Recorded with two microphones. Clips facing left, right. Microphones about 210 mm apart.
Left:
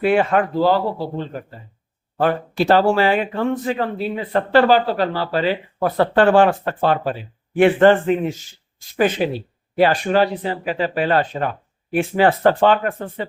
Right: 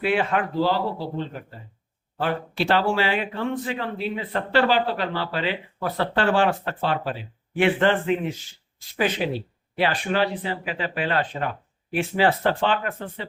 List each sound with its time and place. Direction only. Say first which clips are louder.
0.0 s speech: left 6 dB; 45° left (ahead or behind)